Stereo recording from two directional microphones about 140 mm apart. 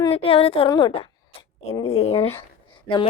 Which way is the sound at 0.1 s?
45° left (ahead or behind).